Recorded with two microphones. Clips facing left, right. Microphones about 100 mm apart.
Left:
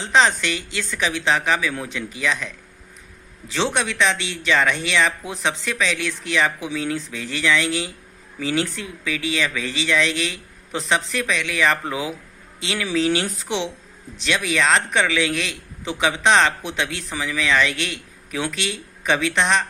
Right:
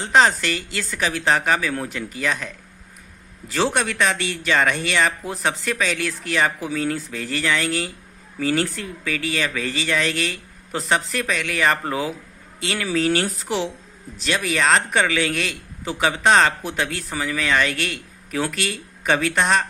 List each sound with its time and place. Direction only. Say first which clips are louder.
0.4 s speech: even; 45° right (ahead or behind)
3.8 s a man's voice: even; 45° right (ahead or behind)
13.2 s speech: right 2 dB; centre (ahead or behind)
14.2 s a man's voice: even; 40° right (ahead or behind)